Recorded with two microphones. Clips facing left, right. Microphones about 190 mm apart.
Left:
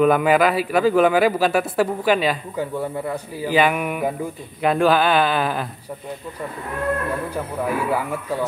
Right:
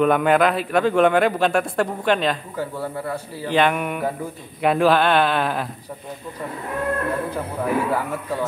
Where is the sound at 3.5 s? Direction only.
5° left (ahead or behind).